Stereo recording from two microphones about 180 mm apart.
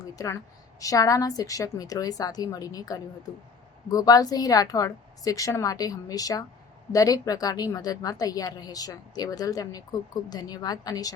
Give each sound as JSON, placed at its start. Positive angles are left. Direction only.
{"t": 0.0, "sound": "a woman's voice", "side_deg": 20}